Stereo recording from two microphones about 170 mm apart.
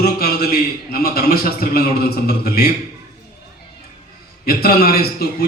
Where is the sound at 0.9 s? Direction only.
65° left (ahead or behind).